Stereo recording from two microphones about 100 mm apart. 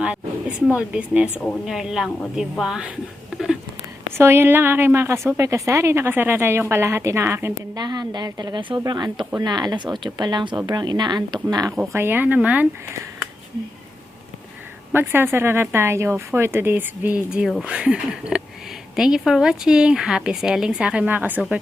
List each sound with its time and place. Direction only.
0.0 s speech: 10° right (ahead or behind)
4.1 s speech: 25° right (ahead or behind)
7.8 s speech: 45° right (ahead or behind)
11.9 s speech: 25° right (ahead or behind)
14.9 s speech: 20° right (ahead or behind)